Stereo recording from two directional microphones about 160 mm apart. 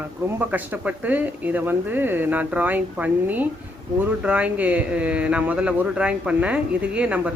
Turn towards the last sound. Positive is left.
turn(degrees=-10)  # may be behind; listen again after turning